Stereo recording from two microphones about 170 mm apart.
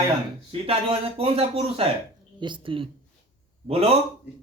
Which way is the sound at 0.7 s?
35° right (ahead or behind).